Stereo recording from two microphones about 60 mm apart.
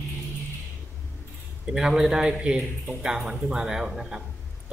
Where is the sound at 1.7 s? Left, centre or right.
Centre.